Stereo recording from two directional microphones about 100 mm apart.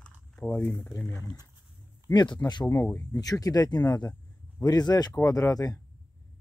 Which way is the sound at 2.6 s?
25° left (ahead or behind).